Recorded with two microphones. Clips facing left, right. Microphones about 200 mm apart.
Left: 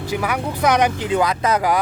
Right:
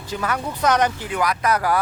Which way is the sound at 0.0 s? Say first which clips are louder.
Left 3 dB; 10° left (ahead or behind).